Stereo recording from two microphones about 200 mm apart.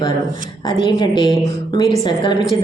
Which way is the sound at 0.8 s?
20° left (ahead or behind).